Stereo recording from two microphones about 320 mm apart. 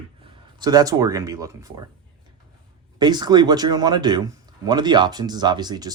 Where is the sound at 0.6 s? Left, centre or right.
Centre.